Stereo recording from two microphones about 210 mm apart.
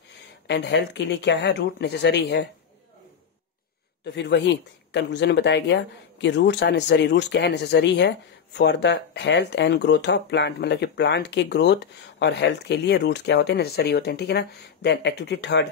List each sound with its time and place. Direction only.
0.5 s speech: 55° left (ahead or behind)
4.0 s speech: 55° left (ahead or behind)